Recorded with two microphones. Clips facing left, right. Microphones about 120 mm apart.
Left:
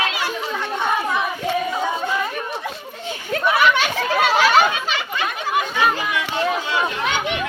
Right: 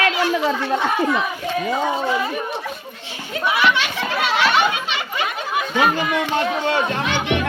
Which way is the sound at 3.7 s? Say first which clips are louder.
Left 3 dB; 40° left (ahead or behind).